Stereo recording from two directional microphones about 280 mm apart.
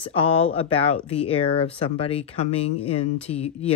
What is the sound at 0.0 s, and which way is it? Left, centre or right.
Speech, centre.